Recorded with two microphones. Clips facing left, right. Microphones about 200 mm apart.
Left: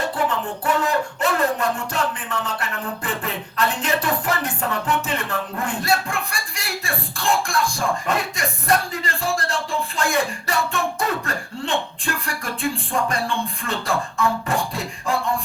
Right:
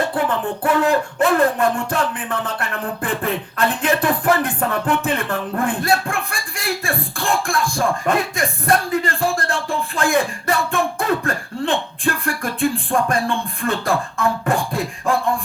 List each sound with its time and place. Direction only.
0.3 s music: 55° right (ahead or behind)